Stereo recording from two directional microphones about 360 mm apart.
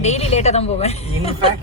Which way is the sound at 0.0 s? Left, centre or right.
Centre.